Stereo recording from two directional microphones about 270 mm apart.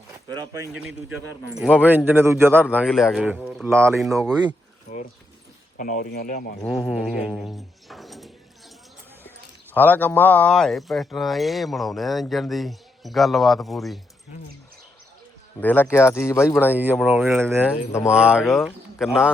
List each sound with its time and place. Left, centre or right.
0.3 s speech: centre
1.1 s speech: centre
4.9 s speech: left
6.6 s speech: centre
9.7 s speech: centre
15.6 s speech: centre
16.7 s speech: centre